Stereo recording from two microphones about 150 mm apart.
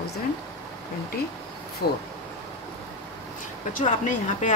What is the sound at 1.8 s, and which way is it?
Speech, 90° left.